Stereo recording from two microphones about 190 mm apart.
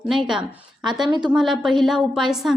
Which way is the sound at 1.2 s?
5° right (ahead or behind).